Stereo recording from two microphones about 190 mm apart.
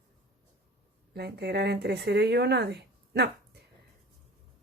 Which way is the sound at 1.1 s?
60° right (ahead or behind).